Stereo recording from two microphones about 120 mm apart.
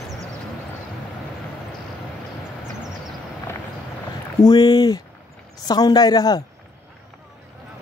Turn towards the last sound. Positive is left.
turn(degrees=30)  # may be behind; listen again after turning